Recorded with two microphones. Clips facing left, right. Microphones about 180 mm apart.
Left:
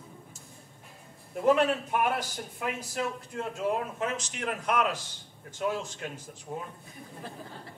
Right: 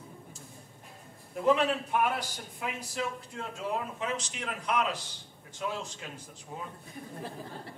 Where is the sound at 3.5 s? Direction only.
50° left (ahead or behind).